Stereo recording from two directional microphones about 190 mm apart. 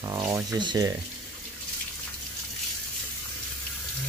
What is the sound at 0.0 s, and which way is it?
Speech, 15° right (ahead or behind).